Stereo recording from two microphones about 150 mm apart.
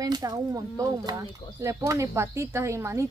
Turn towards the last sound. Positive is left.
turn(degrees=-20)  # may be behind; listen again after turning